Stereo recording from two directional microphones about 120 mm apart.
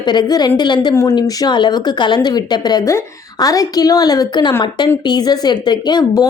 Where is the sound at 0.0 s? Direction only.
35° left (ahead or behind).